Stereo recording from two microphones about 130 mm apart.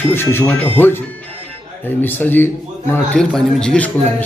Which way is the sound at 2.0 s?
15° left (ahead or behind).